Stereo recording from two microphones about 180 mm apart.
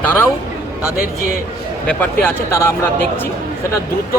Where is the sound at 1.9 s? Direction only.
10° left (ahead or behind).